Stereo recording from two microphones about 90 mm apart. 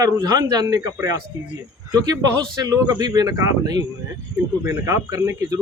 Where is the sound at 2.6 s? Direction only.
45° right (ahead or behind).